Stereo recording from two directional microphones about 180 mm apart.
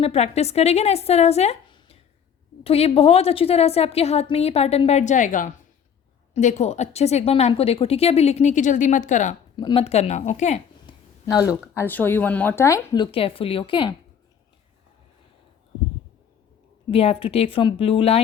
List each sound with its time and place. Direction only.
0.0 s a woman's voice: 35° left (ahead or behind)
9.6 s a woman's voice: 25° left (ahead or behind)
10.8 s a sound: 20° left (ahead or behind)
11.7 s speech: 10° left (ahead or behind); by 13.9 s 30° left (ahead or behind)
16.9 s a woman's voice: 30° left (ahead or behind)